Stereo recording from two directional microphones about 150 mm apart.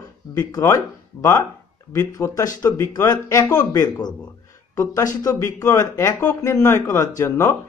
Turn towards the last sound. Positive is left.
turn(degrees=20)  # may be behind; listen again after turning